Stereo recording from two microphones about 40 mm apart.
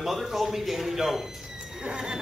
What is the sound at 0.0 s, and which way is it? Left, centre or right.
Speech, centre.